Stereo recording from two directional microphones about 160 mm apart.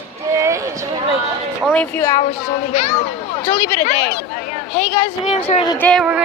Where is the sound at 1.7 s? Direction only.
10° left (ahead or behind).